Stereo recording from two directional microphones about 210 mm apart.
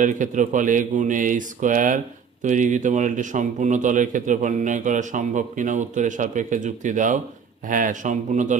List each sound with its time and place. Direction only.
0.0 s a man's voice: 35° right (ahead or behind)